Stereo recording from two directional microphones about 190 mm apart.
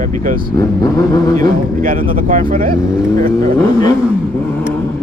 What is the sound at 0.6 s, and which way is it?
Vehicle, 20° left (ahead or behind).